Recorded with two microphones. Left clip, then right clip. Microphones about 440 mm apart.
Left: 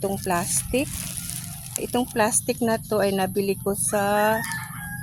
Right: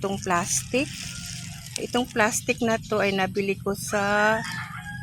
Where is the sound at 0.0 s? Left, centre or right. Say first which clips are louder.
Even; left.